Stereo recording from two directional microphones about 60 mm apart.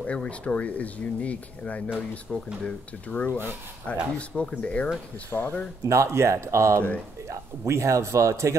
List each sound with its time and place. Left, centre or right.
0.0 s speech: left
2.3 s speech: centre
5.3 s speech: left
5.9 s a man's voice: right